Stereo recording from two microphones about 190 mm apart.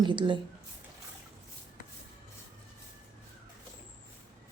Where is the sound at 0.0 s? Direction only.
25° right (ahead or behind).